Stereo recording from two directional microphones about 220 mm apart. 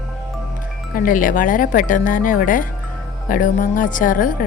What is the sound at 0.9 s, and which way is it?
A woman's voice, 40° left (ahead or behind).